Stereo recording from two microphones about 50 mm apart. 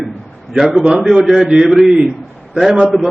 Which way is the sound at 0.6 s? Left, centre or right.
Centre.